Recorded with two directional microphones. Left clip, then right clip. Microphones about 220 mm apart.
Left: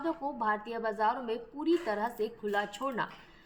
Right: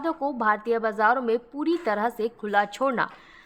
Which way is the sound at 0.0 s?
45° right (ahead or behind).